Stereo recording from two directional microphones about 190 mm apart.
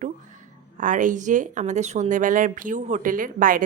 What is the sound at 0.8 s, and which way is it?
A woman's voice, 40° right (ahead or behind).